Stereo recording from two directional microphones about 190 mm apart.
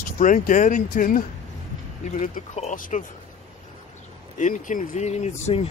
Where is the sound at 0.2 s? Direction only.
40° left (ahead or behind).